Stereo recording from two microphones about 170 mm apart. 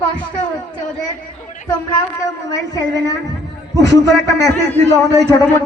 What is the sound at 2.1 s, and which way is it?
A man's voice, 20° left (ahead or behind).